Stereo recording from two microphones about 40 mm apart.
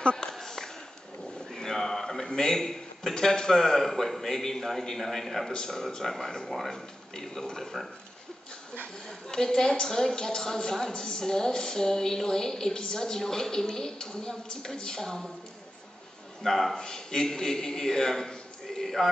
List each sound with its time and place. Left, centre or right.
0.0 s a sound: left
1.5 s a man's voice: centre
5.5 s a woman's voice: centre
9.3 s a woman's voice: centre
16.4 s speech: centre
16.7 s a man's voice: centre